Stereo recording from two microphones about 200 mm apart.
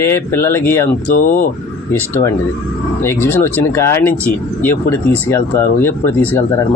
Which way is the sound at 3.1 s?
10° left (ahead or behind).